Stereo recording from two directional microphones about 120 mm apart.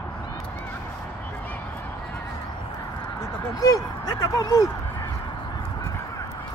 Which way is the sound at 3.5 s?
30° left (ahead or behind).